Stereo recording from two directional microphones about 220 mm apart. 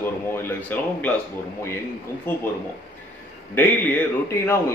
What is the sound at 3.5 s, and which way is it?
A man's voice, 10° left (ahead or behind).